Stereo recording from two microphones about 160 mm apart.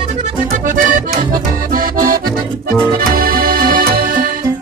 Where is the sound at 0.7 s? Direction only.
60° right (ahead or behind).